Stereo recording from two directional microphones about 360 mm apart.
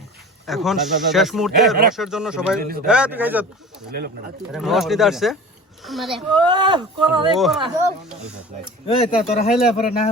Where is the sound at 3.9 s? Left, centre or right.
Right.